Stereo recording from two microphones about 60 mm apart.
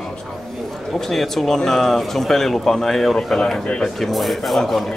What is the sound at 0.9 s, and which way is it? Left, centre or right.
A man's voice, centre.